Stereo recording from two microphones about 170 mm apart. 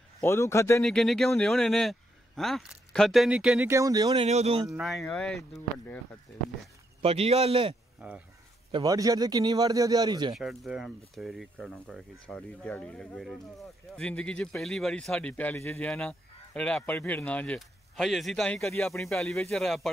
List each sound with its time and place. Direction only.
0.2 s speech: 15° left (ahead or behind)
0.8 s speech: centre (ahead or behind)
3.7 s a man's voice: 20° right (ahead or behind)
4.1 s speech: 35° right (ahead or behind)
4.6 s speech: centre (ahead or behind)
7.0 s speech: 35° right (ahead or behind)
8.0 s speech: 5° right (ahead or behind)
8.7 s a man's voice: 20° right (ahead or behind)
10.3 s speech: centre (ahead or behind)
15.9 s speech: 5° left (ahead or behind)